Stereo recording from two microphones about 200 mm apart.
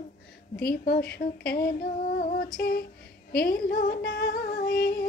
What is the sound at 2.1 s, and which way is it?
Female singing, 45° left (ahead or behind).